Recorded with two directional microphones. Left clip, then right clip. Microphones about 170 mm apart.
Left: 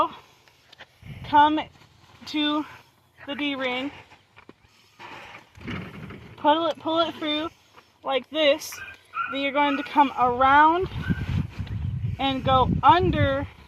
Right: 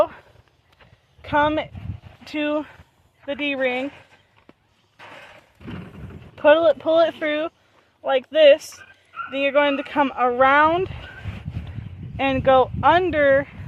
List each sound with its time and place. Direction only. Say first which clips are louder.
1.2 s speech: left 1 dB; 30° right (ahead or behind)
6.3 s speech: right 7 dB; 30° right (ahead or behind)
12.1 s speech: right 5 dB; 25° right (ahead or behind)